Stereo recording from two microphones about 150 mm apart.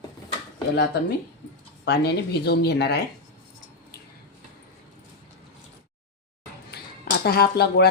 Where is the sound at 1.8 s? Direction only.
90° left.